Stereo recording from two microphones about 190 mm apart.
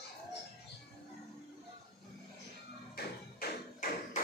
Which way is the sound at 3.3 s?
45° left (ahead or behind).